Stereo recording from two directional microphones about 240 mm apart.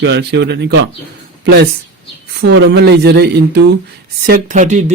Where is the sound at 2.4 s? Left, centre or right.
Right.